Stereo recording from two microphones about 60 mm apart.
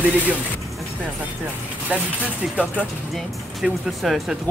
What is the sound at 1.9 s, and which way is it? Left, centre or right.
Speech, right.